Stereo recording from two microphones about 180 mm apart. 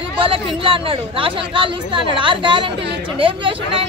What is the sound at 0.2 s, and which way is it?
Speech, 30° right (ahead or behind).